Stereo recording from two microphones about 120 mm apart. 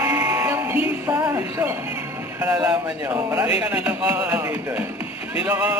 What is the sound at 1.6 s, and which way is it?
Music, 15° right (ahead or behind).